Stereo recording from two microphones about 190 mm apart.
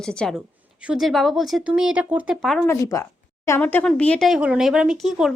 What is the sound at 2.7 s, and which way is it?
A woman's voice, 15° left (ahead or behind).